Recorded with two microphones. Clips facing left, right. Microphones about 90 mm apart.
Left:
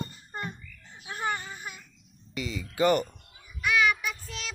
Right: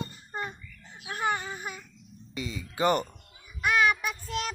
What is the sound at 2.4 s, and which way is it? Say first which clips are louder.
Speech: left 2 dB; 25° right (ahead or behind).